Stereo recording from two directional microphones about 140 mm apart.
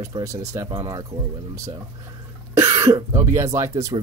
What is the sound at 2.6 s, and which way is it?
Speech, 20° right (ahead or behind).